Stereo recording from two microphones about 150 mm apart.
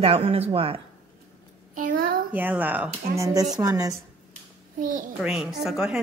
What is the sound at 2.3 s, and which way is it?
Speech, 10° right (ahead or behind).